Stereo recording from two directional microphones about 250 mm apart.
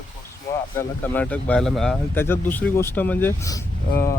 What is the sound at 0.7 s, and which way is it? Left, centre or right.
Speech, centre.